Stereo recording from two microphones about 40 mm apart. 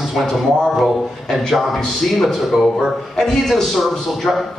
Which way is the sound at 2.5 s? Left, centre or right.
Centre.